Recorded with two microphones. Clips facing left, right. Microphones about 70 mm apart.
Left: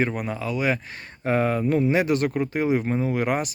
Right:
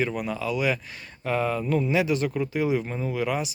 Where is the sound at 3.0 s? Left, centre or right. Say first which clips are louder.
Left 3 dB; left.